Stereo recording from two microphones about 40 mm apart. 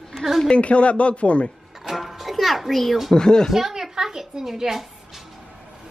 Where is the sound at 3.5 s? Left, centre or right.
Centre.